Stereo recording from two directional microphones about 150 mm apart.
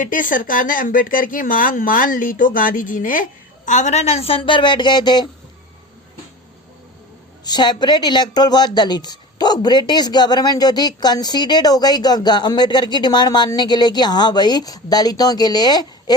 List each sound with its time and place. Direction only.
0.0 s speech: 65° left (ahead or behind)
3.7 s a woman's voice: 50° left (ahead or behind); by 5.3 s 30° left (ahead or behind)
7.4 s speech: 30° left (ahead or behind)